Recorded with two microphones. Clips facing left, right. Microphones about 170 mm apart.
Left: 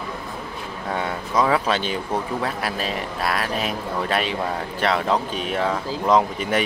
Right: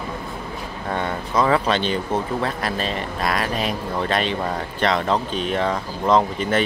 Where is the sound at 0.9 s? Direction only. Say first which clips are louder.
Right 1 dB; 10° left (ahead or behind).